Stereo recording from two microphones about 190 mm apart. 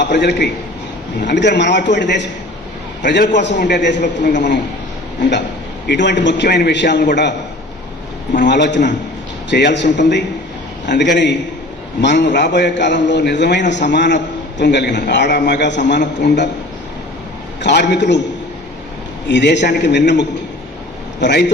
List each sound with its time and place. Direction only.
0.0 s a man's voice: 65° left (ahead or behind)
5.9 s a man's voice: 65° left (ahead or behind)
8.4 s a man's voice: 65° left (ahead or behind)
17.6 s a man's voice: 65° left (ahead or behind)
19.3 s a man's voice: 65° left (ahead or behind)